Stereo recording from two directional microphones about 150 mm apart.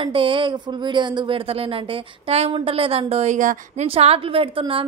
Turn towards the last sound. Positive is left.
turn(degrees=-35)  # may be behind; listen again after turning